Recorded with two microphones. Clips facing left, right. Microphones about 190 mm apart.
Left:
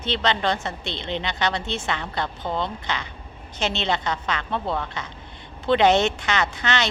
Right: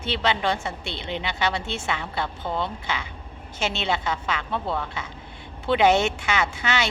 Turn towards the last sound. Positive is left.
turn(degrees=-10)  # may be behind; listen again after turning